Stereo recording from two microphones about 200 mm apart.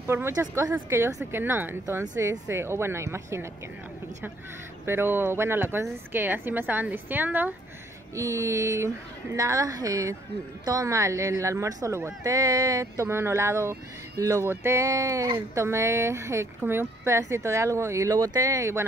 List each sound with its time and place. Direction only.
0.0 s speech: 10° right (ahead or behind)
4.8 s speech: 10° right (ahead or behind)